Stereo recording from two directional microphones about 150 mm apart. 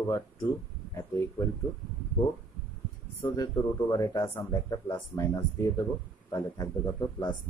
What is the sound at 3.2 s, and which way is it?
Speech, 25° left (ahead or behind).